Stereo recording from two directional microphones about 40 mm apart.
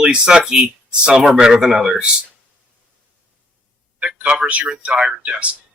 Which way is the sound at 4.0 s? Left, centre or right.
Right.